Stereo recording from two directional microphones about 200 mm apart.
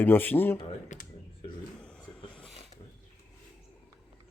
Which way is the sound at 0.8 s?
40° left (ahead or behind).